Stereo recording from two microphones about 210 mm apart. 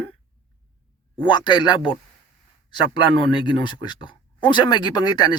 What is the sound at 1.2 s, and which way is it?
Speech, 20° left (ahead or behind).